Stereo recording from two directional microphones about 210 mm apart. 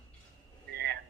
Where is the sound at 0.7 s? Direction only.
50° right (ahead or behind).